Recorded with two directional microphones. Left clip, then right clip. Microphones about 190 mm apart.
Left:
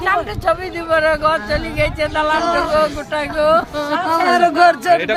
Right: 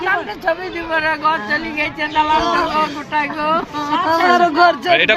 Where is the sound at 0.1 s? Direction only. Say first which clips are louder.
Left 3 dB; 30° left (ahead or behind).